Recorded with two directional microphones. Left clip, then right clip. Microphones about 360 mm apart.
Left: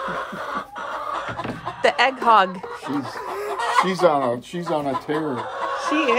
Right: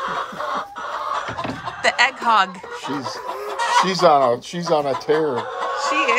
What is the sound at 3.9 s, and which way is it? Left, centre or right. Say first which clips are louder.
Speech: right 4 dB; right.